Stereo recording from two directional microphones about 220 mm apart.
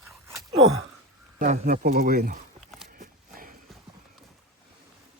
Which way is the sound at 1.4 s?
35° right (ahead or behind).